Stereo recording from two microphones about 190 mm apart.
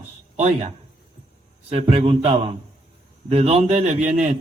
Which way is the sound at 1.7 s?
35° right (ahead or behind).